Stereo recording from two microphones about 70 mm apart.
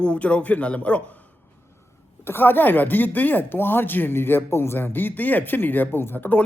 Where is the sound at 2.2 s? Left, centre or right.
Left.